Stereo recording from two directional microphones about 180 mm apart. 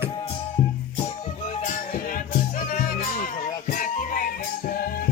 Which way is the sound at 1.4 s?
45° left (ahead or behind).